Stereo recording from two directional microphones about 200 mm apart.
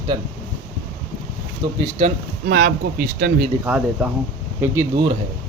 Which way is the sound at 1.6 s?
20° right (ahead or behind).